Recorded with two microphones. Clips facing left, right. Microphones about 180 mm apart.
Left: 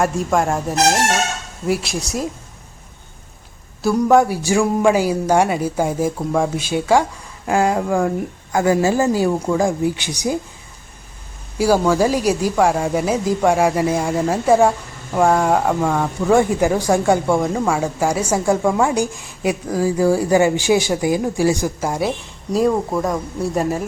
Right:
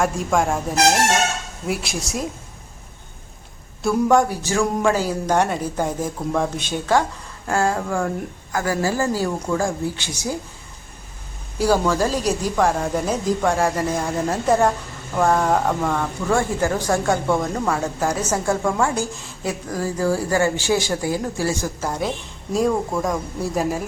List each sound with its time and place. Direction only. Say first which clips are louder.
0.0 s speech: left 2 dB; centre (ahead or behind)
3.8 s a woman's voice: left 3 dB; 5° left (ahead or behind)
11.5 s a woman's voice: left 3 dB; 10° left (ahead or behind)